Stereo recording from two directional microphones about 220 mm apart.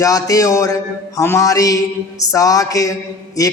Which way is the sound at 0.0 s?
15° left (ahead or behind).